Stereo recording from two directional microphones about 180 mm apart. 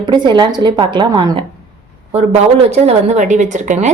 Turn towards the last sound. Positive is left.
turn(degrees=-40)  # may be behind; listen again after turning